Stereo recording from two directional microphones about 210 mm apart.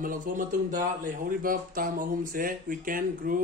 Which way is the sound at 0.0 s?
40° right (ahead or behind).